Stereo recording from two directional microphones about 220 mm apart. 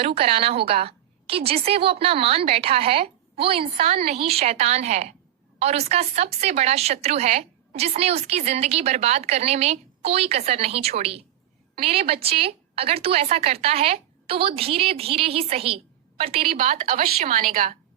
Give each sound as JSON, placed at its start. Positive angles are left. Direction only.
{"t": 0.0, "sound": "a woman's voice", "side_deg": -25}